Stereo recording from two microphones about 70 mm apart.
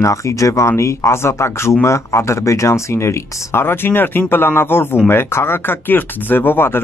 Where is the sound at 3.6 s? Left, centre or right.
Left.